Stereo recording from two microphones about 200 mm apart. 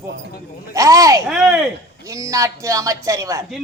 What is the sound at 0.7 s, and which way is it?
Speech, 15° right (ahead or behind).